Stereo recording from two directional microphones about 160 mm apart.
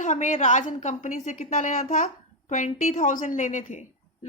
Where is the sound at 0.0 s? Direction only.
50° left (ahead or behind).